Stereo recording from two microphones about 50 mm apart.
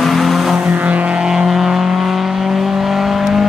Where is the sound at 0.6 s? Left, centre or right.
Right.